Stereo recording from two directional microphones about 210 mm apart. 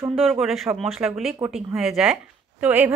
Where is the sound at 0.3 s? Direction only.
Centre (ahead or behind).